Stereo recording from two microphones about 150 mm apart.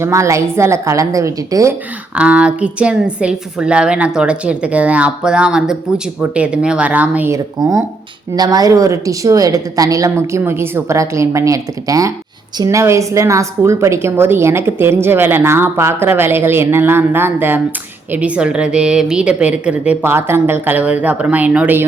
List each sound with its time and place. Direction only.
0.0 s a woman's voice: 20° right (ahead or behind)
2.1 s a woman's voice: 10° right (ahead or behind)